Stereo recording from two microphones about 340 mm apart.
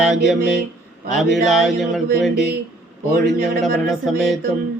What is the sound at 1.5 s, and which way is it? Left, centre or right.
Speech, centre.